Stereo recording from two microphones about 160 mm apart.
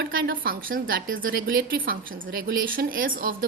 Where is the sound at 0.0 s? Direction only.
70° right (ahead or behind).